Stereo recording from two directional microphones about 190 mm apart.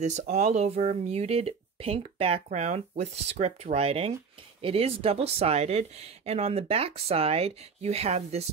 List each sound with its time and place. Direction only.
0.0 s speech: 35° right (ahead or behind)